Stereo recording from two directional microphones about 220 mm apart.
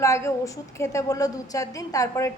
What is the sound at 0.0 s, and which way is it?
A woman's voice, 15° left (ahead or behind).